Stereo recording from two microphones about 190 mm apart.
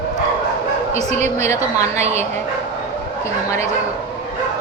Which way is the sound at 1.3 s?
15° left (ahead or behind).